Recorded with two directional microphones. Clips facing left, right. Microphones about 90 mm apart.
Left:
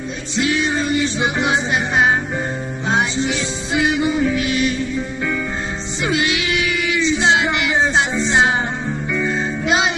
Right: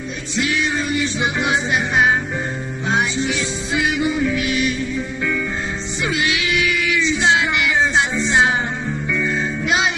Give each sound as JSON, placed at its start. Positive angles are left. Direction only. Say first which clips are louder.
{"t": 0.3, "sound": "music", "louder": "left 2 dB", "side_deg": 30}
{"t": 6.0, "sound": "music", "louder": "left 2 dB", "side_deg": 25}